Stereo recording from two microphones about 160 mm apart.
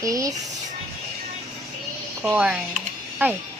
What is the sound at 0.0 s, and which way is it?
Female singing, 20° right (ahead or behind).